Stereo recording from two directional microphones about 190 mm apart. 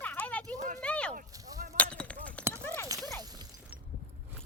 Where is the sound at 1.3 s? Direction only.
20° right (ahead or behind).